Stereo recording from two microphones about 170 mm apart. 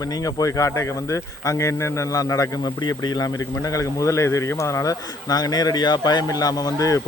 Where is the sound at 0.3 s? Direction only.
20° left (ahead or behind).